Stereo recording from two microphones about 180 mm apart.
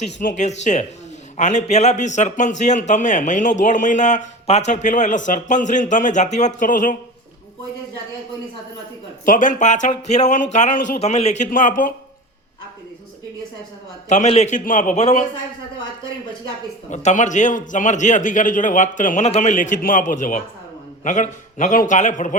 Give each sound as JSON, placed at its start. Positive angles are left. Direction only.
{"t": 0.0, "sound": "a man's voice", "side_deg": 45}
{"t": 9.2, "sound": "a man's voice", "side_deg": 45}
{"t": 14.1, "sound": "a man's voice", "side_deg": 40}
{"t": 16.9, "sound": "a man's voice", "side_deg": 40}